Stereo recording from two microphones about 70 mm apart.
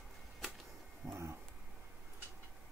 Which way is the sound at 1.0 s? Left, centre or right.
Right.